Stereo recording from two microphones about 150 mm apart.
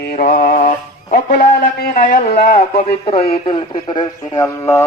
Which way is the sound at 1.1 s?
85° left.